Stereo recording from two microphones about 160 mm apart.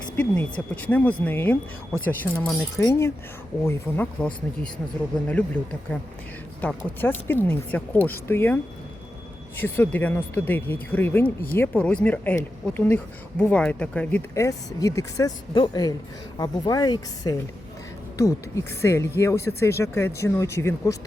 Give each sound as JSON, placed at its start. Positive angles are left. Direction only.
{"t": 0.2, "sound": "speech", "side_deg": 10}
{"t": 5.9, "sound": "speech", "side_deg": 5}
{"t": 9.6, "sound": "speech", "side_deg": 15}